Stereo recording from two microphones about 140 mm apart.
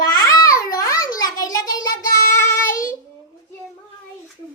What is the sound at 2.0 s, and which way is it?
Child singing, 70° left (ahead or behind).